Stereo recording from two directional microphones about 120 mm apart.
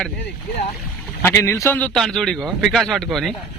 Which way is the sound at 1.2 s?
20° left (ahead or behind).